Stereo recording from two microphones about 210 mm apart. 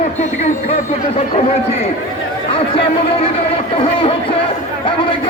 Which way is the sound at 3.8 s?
25° left (ahead or behind).